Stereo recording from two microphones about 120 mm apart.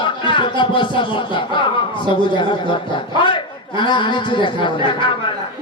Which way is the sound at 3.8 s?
40° left (ahead or behind).